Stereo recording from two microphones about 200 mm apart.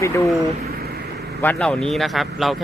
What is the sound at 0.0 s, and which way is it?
Speech, 15° left (ahead or behind).